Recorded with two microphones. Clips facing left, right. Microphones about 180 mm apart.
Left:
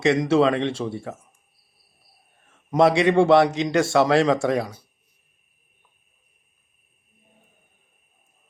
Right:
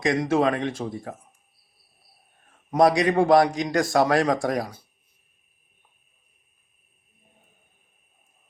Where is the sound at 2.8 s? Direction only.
25° left (ahead or behind).